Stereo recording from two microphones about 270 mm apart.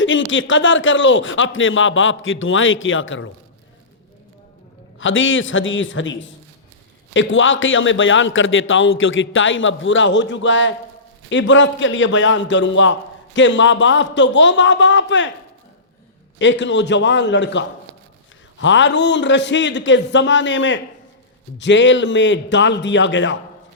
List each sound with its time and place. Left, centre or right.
0.0 s a man's voice: left
4.9 s a man's voice: left
16.4 s a man's voice: left